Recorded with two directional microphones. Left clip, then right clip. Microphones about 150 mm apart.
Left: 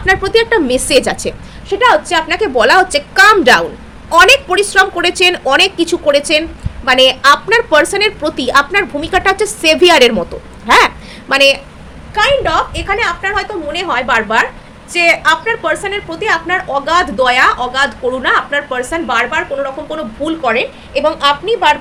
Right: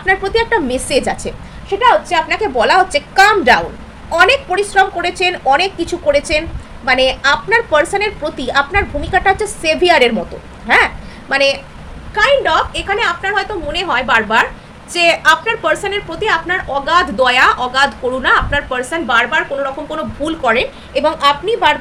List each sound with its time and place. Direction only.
0.0 s a woman's voice: 50° left (ahead or behind); by 11.6 s 30° left (ahead or behind)
12.1 s a woman's voice: 10° left (ahead or behind); by 21.8 s 15° right (ahead or behind)